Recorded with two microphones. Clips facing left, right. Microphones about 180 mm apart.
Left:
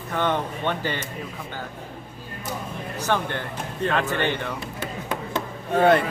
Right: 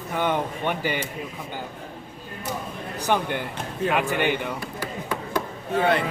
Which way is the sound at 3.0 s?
15° right (ahead or behind).